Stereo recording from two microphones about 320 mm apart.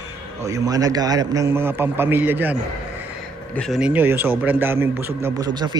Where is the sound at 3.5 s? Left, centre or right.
Centre.